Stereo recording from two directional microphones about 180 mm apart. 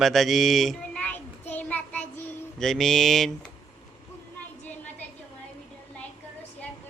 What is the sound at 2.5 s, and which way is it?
Speech, centre (ahead or behind).